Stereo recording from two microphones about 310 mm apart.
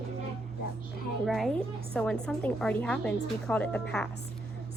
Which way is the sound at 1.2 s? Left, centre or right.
Centre.